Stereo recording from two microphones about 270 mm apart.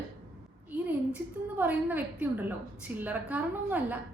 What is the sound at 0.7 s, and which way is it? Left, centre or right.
A woman's voice, centre.